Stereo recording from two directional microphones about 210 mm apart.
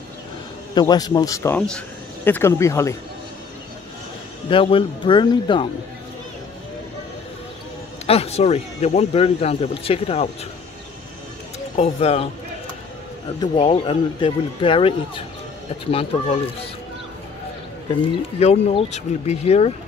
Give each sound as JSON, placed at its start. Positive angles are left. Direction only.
{"t": 0.7, "sound": "speech", "side_deg": 20}
{"t": 4.5, "sound": "speech", "side_deg": 25}
{"t": 8.1, "sound": "speech", "side_deg": 30}
{"t": 11.7, "sound": "speech", "side_deg": 30}
{"t": 13.4, "sound": "speech", "side_deg": 25}
{"t": 18.4, "sound": "speech", "side_deg": 30}